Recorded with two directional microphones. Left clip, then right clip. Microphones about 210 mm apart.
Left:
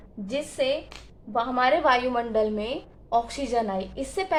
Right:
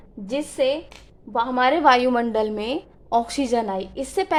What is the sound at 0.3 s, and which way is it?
A woman's voice, 40° right (ahead or behind).